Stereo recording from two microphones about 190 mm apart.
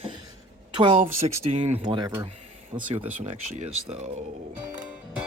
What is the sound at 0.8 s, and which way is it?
Speech, 30° right (ahead or behind).